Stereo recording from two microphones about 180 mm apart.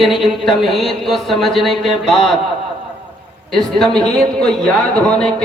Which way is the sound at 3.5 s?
Centre (ahead or behind).